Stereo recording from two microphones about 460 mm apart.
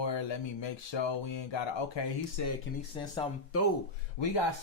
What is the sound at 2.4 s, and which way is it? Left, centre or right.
Speech, left.